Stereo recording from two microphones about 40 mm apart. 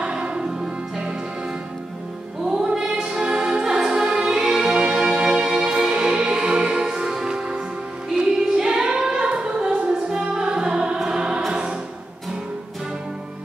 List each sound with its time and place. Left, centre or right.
0.0 s music: right
2.4 s music: centre
8.2 s singing: centre
9.4 s music: centre